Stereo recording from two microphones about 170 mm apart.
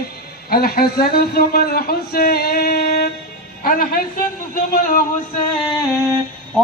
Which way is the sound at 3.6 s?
55° left (ahead or behind).